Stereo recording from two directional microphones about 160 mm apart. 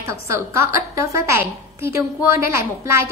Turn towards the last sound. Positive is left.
turn(degrees=-15)  # may be behind; listen again after turning